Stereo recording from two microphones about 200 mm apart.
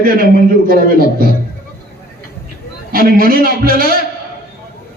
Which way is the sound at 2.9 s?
45° right (ahead or behind).